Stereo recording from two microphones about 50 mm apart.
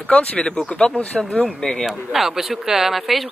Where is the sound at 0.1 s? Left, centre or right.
Left.